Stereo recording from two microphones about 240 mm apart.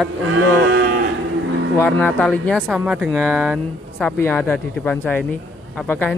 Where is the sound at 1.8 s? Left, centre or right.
Centre.